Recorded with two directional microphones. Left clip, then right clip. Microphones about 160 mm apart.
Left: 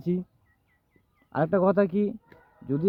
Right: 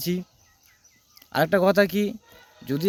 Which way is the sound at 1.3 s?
5° right (ahead or behind).